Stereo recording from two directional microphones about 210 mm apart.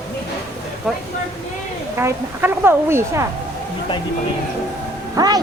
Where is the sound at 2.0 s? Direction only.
10° right (ahead or behind).